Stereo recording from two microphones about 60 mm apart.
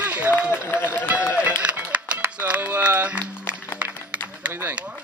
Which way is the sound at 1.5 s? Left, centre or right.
Centre.